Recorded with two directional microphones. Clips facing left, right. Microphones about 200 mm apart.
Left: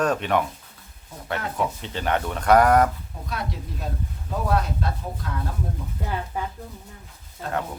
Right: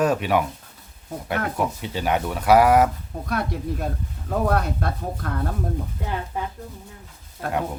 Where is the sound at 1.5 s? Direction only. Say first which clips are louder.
Right 2 dB; 10° right (ahead or behind).